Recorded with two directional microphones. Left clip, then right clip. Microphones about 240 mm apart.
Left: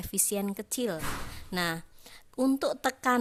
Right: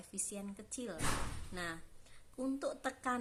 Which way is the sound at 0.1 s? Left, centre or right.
Left.